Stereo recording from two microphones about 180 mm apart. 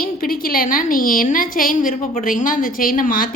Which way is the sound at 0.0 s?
55° left (ahead or behind).